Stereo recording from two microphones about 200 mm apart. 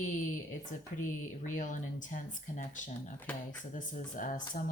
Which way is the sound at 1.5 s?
40° left (ahead or behind).